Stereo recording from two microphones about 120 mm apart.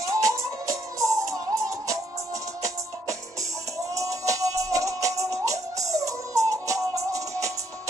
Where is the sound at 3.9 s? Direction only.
25° right (ahead or behind).